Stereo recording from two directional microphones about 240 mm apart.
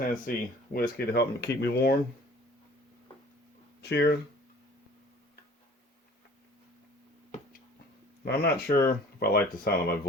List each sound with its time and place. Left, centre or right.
0.1 s speech: left
3.8 s speech: left
8.2 s speech: left